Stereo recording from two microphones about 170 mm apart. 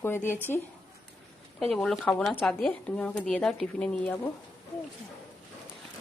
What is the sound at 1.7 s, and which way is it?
Speech, centre (ahead or behind).